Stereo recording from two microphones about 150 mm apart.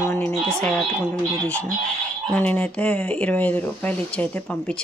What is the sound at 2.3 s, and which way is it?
Speech, 10° left (ahead or behind).